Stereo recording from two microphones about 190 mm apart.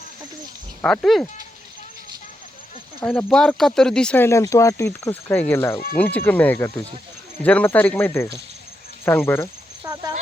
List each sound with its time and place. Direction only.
0.8 s speech: centre (ahead or behind)
3.0 s speech: 10° left (ahead or behind)
9.8 s speech: 20° right (ahead or behind)